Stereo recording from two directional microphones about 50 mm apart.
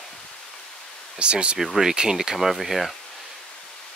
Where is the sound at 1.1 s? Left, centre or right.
Right.